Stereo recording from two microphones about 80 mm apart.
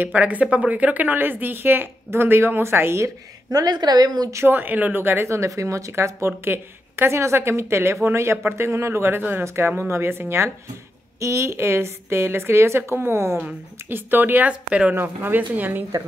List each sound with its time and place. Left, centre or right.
0.0 s speech: centre
3.6 s a woman's voice: right
4.3 s speech: right; by 15.0 s centre
15.0 s speech: right